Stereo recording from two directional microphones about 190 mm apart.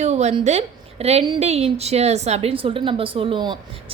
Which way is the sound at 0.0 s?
35° right (ahead or behind).